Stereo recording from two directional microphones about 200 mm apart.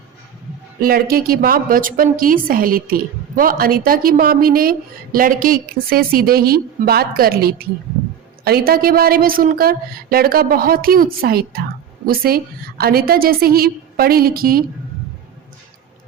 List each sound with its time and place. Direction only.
0.8 s a woman's voice: 50° right (ahead or behind)